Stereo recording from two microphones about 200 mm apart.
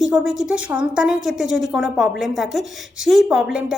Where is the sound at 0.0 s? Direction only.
5° right (ahead or behind).